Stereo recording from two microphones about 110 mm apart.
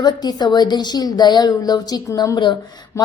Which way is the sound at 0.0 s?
40° left (ahead or behind).